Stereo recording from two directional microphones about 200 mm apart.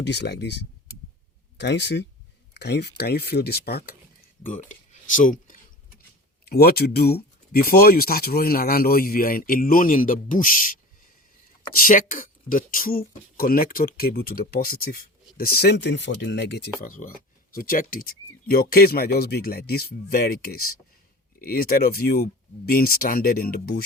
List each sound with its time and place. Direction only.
0.0 s speech: 60° left (ahead or behind)
4.4 s speech: 40° left (ahead or behind)